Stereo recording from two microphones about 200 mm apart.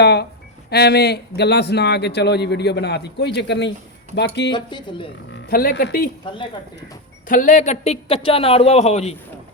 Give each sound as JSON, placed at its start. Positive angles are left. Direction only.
{"t": 0.0, "sound": "a sound", "side_deg": 55}
{"t": 0.7, "sound": "a man's voice", "side_deg": 55}
{"t": 4.5, "sound": "speech", "side_deg": 25}
{"t": 5.3, "sound": "speech", "side_deg": 50}
{"t": 7.3, "sound": "speech", "side_deg": 40}